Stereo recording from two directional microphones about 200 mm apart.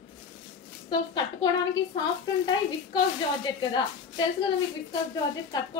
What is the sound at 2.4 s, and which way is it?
Speech, 20° left (ahead or behind).